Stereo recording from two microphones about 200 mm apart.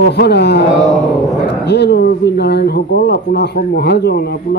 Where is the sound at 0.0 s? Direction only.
55° left (ahead or behind).